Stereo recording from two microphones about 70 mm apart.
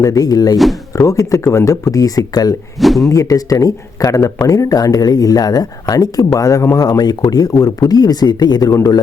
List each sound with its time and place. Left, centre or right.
0.0 s speech: left
2.7 s speech: centre
3.1 s speech: left
6.7 s speech: left
8.7 s speech: left